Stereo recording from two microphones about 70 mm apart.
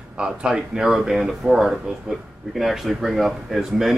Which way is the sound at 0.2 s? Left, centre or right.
Centre.